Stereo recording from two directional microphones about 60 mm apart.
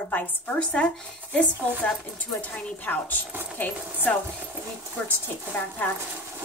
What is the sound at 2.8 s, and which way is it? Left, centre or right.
Speech, left.